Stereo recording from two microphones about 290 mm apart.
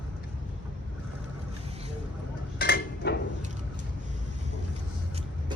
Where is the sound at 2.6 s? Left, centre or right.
Left.